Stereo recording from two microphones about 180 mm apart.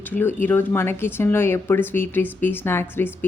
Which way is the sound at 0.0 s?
10° left (ahead or behind).